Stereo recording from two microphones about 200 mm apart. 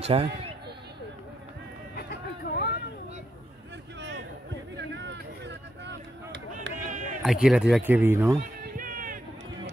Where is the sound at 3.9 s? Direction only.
65° right (ahead or behind).